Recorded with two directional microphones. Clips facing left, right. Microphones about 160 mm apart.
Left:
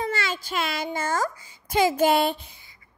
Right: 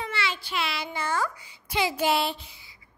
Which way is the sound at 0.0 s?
45° left (ahead or behind).